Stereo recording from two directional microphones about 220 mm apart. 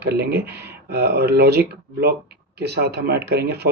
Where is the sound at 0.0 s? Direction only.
45° right (ahead or behind).